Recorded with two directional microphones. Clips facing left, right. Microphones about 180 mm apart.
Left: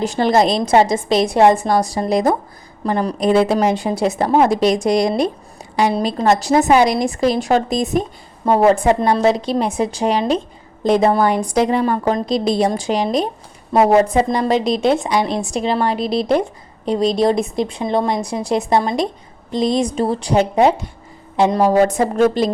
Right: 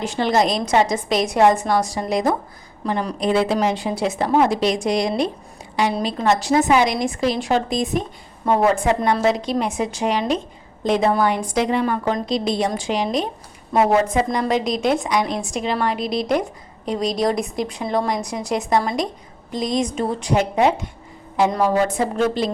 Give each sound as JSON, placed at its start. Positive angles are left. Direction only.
{"t": 0.0, "sound": "a woman's voice", "side_deg": 40}
{"t": 21.3, "sound": "a woman's voice", "side_deg": 25}
{"t": 21.6, "sound": "a woman's voice", "side_deg": 45}